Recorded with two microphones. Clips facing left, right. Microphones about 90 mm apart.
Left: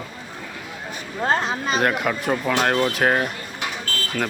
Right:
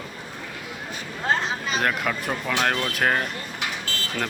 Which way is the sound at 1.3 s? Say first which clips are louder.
Left 2 dB; 40° left (ahead or behind).